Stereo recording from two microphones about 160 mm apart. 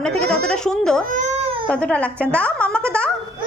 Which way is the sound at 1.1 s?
45° right (ahead or behind).